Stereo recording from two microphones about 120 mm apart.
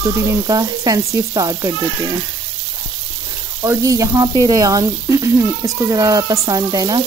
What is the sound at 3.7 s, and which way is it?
Speech, 25° right (ahead or behind).